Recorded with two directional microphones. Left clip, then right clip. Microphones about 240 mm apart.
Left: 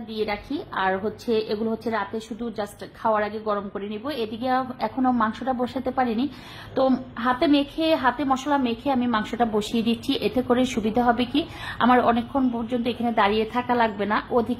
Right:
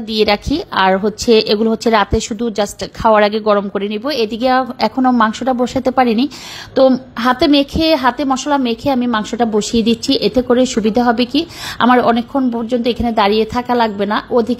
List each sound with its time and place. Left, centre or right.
0.1 s a woman's voice: right